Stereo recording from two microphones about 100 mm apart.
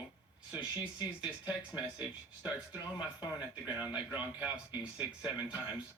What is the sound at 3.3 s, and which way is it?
Speech, 15° right (ahead or behind).